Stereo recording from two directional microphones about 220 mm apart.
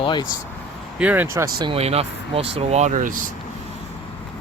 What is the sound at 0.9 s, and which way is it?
Speech, 5° right (ahead or behind).